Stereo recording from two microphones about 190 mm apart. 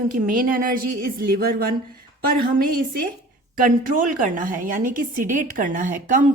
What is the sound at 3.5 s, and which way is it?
Speech, 45° right (ahead or behind).